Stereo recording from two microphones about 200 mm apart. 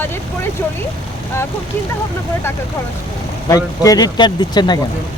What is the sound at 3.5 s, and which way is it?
Speech, 20° left (ahead or behind).